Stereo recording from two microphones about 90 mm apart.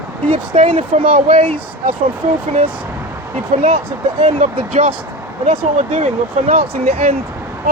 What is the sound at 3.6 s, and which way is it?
Speech, 90° right.